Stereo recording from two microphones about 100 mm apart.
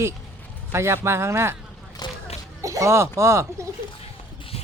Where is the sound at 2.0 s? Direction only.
40° left (ahead or behind).